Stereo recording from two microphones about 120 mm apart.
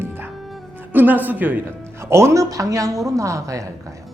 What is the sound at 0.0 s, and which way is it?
Music, 20° right (ahead or behind).